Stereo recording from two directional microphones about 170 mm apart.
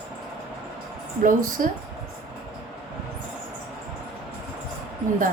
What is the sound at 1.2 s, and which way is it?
Speech, 55° right (ahead or behind).